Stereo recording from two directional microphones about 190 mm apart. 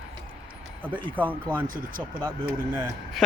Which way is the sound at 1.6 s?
45° right (ahead or behind).